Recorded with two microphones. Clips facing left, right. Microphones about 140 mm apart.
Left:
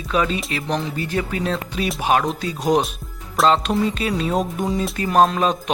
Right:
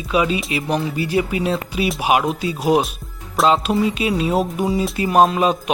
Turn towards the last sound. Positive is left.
turn(degrees=-10)  # may be behind; listen again after turning